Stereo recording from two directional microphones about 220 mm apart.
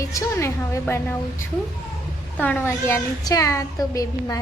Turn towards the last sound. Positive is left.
turn(degrees=15)  # may be behind; listen again after turning